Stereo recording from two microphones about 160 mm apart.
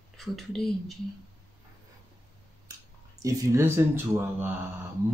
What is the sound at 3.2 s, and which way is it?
Speech, 20° right (ahead or behind).